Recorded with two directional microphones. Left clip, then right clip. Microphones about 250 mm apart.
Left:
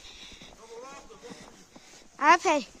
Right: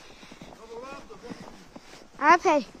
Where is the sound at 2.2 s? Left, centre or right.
Centre.